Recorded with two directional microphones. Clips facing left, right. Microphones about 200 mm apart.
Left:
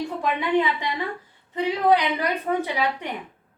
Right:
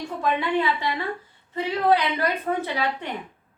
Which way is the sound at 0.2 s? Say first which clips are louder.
Left 1 dB; 15° left (ahead or behind).